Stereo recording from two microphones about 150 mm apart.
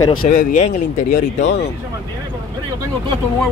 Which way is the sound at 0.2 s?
65° left (ahead or behind).